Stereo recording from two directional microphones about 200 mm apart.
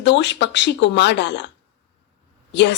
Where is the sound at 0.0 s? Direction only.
60° left (ahead or behind).